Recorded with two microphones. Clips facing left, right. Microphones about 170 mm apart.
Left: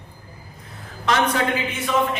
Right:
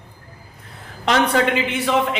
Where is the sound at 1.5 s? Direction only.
80° right.